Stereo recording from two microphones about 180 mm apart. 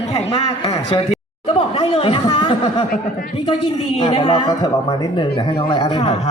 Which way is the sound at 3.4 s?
30° left (ahead or behind).